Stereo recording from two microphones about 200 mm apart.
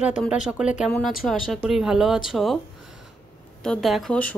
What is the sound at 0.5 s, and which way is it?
Speech, 5° right (ahead or behind).